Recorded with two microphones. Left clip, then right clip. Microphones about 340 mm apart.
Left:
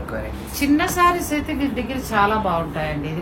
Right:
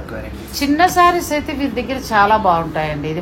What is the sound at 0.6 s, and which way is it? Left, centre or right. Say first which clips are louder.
A woman's voice: right 5 dB; right.